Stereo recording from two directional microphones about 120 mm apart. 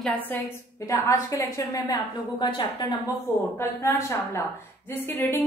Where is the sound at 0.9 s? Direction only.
25° left (ahead or behind).